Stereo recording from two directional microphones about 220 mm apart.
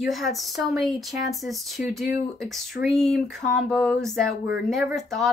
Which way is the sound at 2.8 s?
Centre (ahead or behind).